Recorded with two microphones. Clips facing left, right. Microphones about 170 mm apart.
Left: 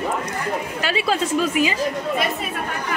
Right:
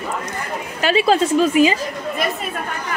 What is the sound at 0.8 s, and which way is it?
Speech, 25° right (ahead or behind).